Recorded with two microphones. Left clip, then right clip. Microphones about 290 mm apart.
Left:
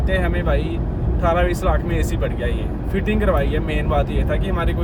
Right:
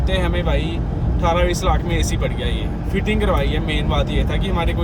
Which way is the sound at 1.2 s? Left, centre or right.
Right.